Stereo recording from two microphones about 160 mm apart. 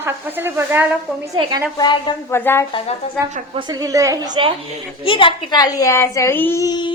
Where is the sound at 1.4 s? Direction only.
25° right (ahead or behind).